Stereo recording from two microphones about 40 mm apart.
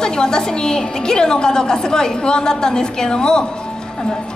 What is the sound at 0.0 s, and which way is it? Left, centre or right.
A woman's voice, centre.